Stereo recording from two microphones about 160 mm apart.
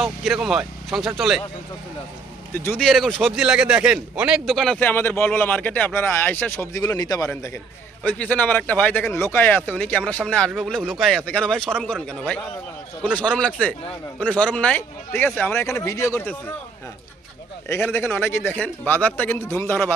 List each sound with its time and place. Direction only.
0.0 s speech: centre (ahead or behind)
2.5 s speech: 15° left (ahead or behind)
17.7 s speech: 15° left (ahead or behind)